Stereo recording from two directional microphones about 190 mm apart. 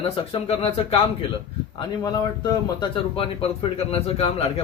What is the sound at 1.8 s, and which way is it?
A man's voice, 20° left (ahead or behind).